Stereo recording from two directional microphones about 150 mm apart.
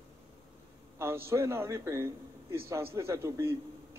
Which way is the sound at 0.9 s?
15° right (ahead or behind).